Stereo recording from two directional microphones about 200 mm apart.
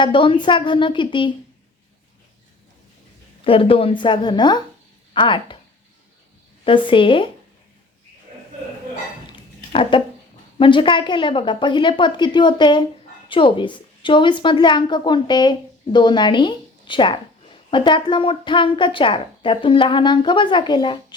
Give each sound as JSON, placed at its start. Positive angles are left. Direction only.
{"t": 0.0, "sound": "a woman's voice", "side_deg": 25}
{"t": 3.4, "sound": "a woman's voice", "side_deg": 25}
{"t": 6.7, "sound": "a woman's voice", "side_deg": 25}
{"t": 9.2, "sound": "a sound", "side_deg": 25}
{"t": 10.6, "sound": "a woman's voice", "side_deg": 25}